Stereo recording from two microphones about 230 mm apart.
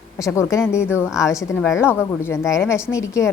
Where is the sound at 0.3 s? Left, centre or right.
Centre.